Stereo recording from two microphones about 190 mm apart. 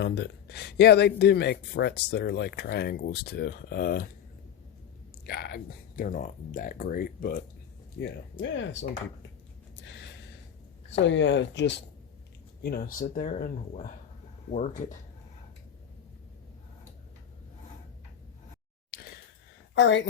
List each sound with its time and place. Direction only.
0.0 s speech: 65° left (ahead or behind)
5.2 s speech: 55° left (ahead or behind)
7.9 s speech: 65° left (ahead or behind)
9.8 s a sound: 65° left (ahead or behind)
10.9 s speech: 75° left (ahead or behind)
12.6 s speech: 50° left (ahead or behind)
18.9 s a sound: 50° left (ahead or behind)
19.8 s speech: 70° left (ahead or behind)